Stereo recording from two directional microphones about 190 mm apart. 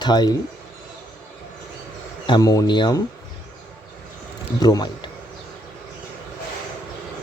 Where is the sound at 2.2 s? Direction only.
20° left (ahead or behind).